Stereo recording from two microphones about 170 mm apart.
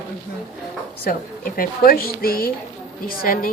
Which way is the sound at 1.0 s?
60° left (ahead or behind).